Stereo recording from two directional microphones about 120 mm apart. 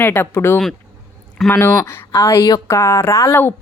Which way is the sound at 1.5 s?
20° left (ahead or behind).